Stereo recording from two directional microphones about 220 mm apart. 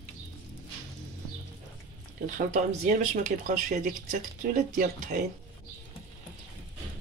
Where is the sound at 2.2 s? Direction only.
35° right (ahead or behind).